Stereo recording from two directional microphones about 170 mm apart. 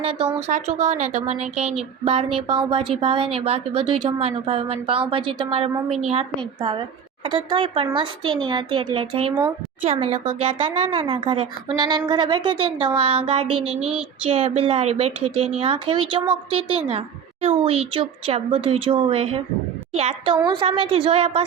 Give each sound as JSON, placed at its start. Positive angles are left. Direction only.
{"t": 0.0, "sound": "a woman's voice", "side_deg": -35}
{"t": 0.4, "sound": "a woman's voice", "side_deg": -45}